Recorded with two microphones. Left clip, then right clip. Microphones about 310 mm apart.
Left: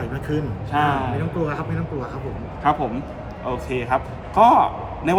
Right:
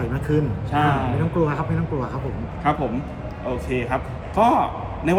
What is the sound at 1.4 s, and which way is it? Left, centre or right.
Speech, centre.